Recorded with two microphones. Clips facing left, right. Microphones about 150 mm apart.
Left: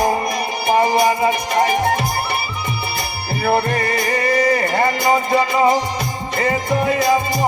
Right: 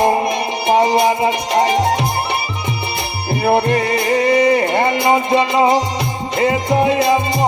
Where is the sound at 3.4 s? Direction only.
20° right (ahead or behind).